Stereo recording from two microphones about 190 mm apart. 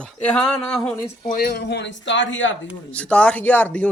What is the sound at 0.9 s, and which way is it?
Speech, 20° left (ahead or behind).